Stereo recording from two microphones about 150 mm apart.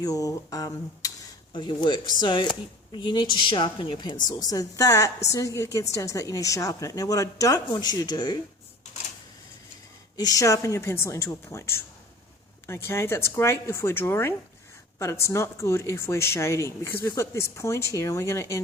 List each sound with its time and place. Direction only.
0.0 s a woman's voice: 25° left (ahead or behind)
10.2 s a woman's voice: 25° left (ahead or behind)